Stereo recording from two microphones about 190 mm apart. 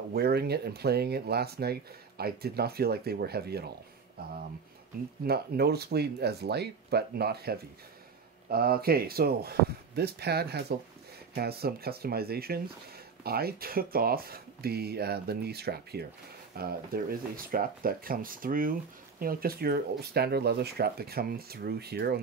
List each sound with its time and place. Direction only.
0.1 s speech: 55° right (ahead or behind)
5.2 s speech: 55° right (ahead or behind)